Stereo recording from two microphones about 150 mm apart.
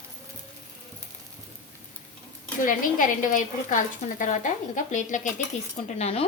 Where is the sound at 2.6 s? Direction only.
65° left (ahead or behind).